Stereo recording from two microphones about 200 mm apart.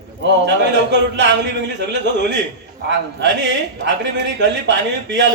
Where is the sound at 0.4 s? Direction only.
60° right (ahead or behind).